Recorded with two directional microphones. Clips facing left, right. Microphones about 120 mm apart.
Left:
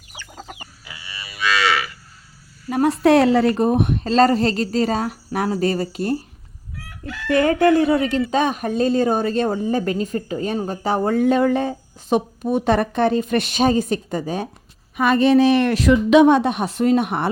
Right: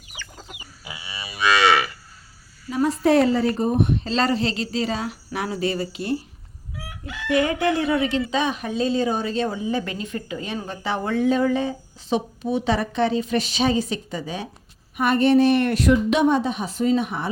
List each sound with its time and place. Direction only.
0.9 s livestock: 15° right (ahead or behind)
2.6 s speech: 60° left (ahead or behind); by 6.1 s 45° left (ahead or behind)
7.0 s chicken: 20° right (ahead or behind)
7.4 s speech: 45° left (ahead or behind)
11.3 s speech: 55° left (ahead or behind)
14.9 s a woman's voice: 90° left; by 17.2 s 65° left (ahead or behind)